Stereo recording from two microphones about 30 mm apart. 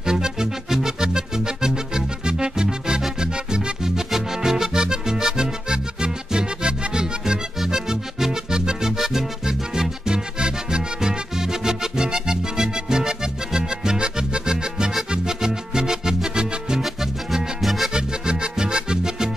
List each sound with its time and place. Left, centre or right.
0.0 s music: right
3.8 s music: centre
16.8 s music: centre
17.9 s music: right